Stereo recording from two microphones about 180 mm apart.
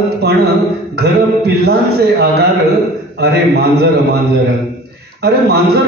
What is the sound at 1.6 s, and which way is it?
A man's voice, 65° right (ahead or behind).